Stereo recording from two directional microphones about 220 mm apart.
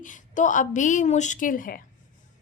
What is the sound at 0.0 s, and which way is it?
Speech, 35° left (ahead or behind).